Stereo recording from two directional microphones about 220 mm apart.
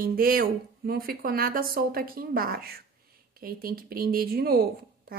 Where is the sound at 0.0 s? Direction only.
40° right (ahead or behind).